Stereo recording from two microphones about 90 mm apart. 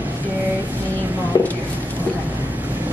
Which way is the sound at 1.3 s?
45° left (ahead or behind).